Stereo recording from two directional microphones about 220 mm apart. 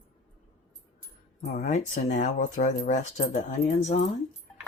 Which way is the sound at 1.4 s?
30° left (ahead or behind).